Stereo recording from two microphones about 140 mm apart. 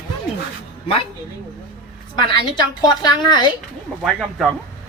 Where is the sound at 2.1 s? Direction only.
30° left (ahead or behind).